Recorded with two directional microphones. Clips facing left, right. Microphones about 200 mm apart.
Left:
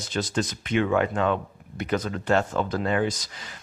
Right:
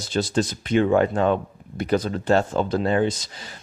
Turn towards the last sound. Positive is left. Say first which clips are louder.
# right 4 dB
turn(degrees=-30)  # may be behind; listen again after turning